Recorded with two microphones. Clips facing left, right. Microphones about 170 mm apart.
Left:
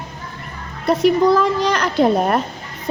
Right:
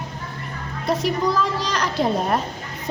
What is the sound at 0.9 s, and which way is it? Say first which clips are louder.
A woman's voice: left 8 dB; 60° left (ahead or behind).